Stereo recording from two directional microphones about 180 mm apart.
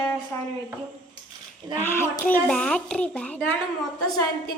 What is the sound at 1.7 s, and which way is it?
A child's voice, 15° left (ahead or behind).